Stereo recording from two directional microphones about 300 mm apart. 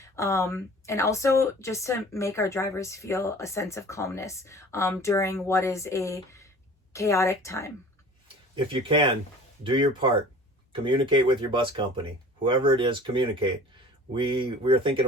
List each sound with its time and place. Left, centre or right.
0.0 s a woman's voice: centre
8.5 s speech: centre